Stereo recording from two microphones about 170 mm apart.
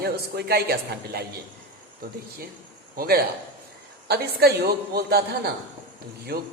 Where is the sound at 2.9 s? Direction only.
65° right (ahead or behind).